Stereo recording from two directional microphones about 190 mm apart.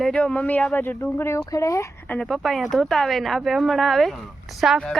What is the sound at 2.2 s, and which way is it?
Speech, centre (ahead or behind).